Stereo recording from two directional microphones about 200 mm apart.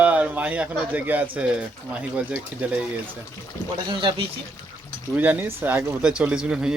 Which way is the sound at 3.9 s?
25° right (ahead or behind).